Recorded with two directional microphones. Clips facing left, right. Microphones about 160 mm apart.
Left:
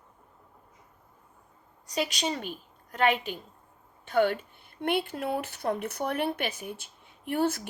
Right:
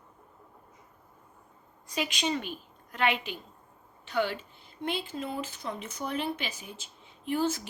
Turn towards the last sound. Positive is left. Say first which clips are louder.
# left 1 dB
turn(degrees=60)  # may be behind; listen again after turning